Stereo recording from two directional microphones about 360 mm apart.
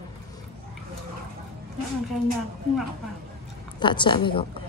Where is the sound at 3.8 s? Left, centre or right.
Centre.